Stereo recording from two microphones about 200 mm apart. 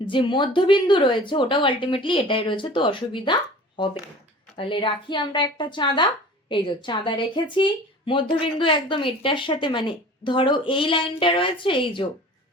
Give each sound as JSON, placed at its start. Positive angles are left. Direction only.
{"t": 0.1, "sound": "speech", "side_deg": 25}
{"t": 4.5, "sound": "speech", "side_deg": 25}